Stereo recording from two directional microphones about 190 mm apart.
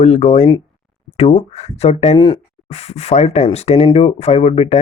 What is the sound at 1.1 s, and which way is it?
Speech, 35° left (ahead or behind).